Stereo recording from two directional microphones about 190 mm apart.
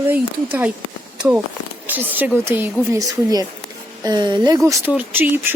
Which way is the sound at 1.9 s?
10° right (ahead or behind).